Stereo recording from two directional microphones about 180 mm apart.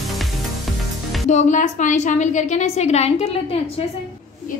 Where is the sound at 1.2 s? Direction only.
40° left (ahead or behind).